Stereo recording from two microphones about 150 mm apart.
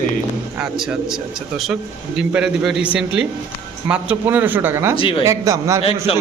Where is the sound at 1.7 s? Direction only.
5° right (ahead or behind).